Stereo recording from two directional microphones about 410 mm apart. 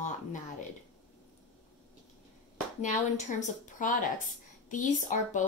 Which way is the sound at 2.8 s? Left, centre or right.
Centre.